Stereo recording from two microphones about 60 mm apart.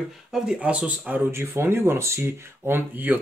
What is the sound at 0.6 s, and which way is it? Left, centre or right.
Speech, right.